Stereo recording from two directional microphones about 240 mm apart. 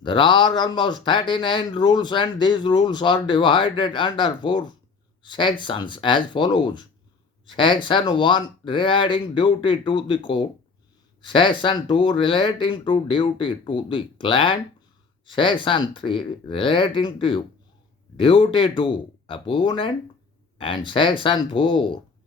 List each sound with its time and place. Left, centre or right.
0.0 s a man's voice: centre